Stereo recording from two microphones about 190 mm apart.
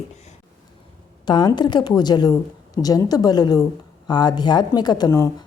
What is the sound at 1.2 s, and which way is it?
A woman's voice, 25° left (ahead or behind).